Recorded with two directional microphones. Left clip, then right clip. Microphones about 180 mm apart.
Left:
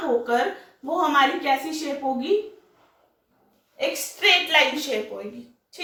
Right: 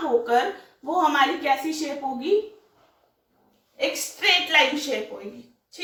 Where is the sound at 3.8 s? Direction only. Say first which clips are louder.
Left 1 dB; 25° left (ahead or behind).